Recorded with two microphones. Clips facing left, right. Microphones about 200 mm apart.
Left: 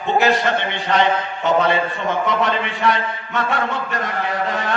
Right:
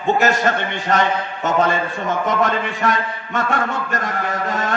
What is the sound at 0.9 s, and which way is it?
A man's voice, 45° right (ahead or behind).